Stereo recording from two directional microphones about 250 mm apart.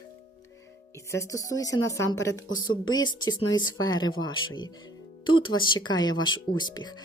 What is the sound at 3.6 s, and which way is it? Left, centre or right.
Speech, centre.